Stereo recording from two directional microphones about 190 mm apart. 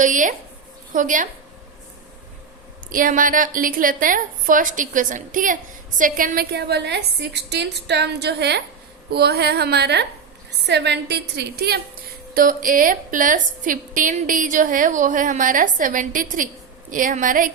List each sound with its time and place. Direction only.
0.0 s a woman's voice: 45° right (ahead or behind)
2.9 s a woman's voice: 45° right (ahead or behind)